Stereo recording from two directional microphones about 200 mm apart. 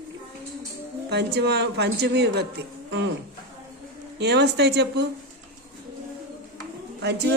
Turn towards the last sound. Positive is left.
turn(degrees=-55)  # may be behind; listen again after turning